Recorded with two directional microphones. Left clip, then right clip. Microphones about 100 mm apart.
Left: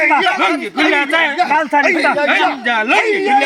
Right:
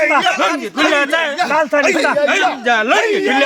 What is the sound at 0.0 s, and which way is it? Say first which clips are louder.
A man's voice: left 1 dB; 40° right (ahead or behind).